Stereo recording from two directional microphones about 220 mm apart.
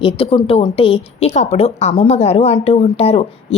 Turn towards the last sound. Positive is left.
turn(degrees=25)  # may be behind; listen again after turning